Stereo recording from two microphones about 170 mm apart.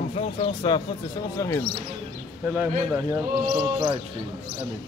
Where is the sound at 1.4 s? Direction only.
15° left (ahead or behind).